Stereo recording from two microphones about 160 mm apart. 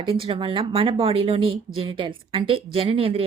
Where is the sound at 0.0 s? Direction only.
35° right (ahead or behind).